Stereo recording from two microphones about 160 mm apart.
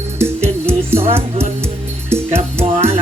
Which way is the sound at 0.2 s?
15° right (ahead or behind).